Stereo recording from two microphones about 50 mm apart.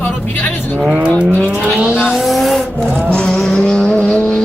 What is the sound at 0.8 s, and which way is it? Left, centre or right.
Speech, right.